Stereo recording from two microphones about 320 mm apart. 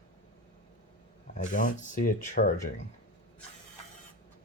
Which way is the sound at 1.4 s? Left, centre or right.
Left.